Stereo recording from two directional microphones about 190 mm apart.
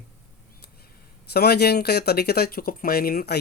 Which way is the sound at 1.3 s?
55° left (ahead or behind).